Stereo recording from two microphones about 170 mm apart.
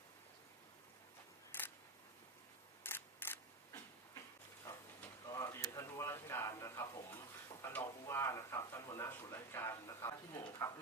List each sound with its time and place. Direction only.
1.5 s camera: 10° left (ahead or behind)
2.8 s camera: 15° left (ahead or behind)
4.6 s a sound: 20° left (ahead or behind)